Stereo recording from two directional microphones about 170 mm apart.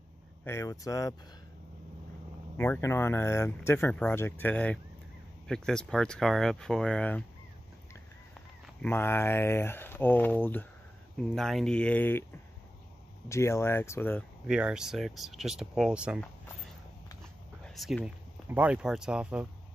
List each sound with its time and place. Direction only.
0.4 s speech: 15° left (ahead or behind)
2.5 s speech: 10° left (ahead or behind)
8.8 s speech: 15° left (ahead or behind)
13.3 s speech: 15° left (ahead or behind)
14.5 s speech: 5° right (ahead or behind)
17.6 s speech: centre (ahead or behind)